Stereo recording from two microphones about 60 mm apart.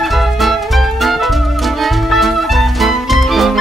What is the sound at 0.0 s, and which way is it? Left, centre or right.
Music, centre.